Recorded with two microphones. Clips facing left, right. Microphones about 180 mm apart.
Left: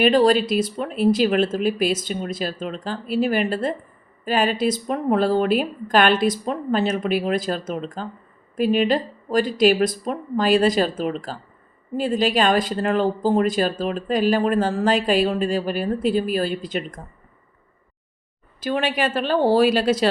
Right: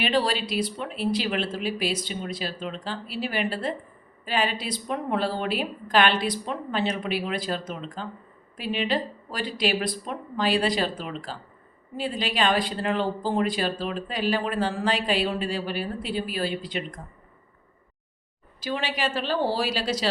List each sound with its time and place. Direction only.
0.0 s speech: 45° left (ahead or behind)
18.6 s speech: 50° left (ahead or behind)